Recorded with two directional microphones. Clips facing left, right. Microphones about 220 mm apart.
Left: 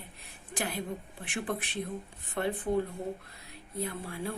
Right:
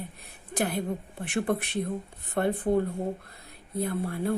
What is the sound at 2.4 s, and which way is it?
Speech, 50° right (ahead or behind).